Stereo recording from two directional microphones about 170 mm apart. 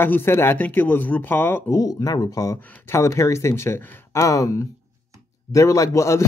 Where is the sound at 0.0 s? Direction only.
15° left (ahead or behind).